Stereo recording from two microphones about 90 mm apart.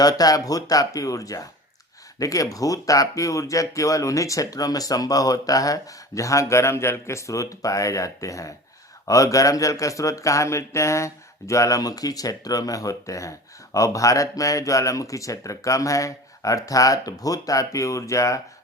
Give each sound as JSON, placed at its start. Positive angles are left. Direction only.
{"t": 0.0, "sound": "speech", "side_deg": 45}